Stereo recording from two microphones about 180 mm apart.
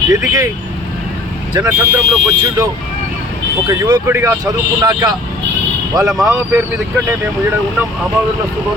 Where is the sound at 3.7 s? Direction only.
20° right (ahead or behind).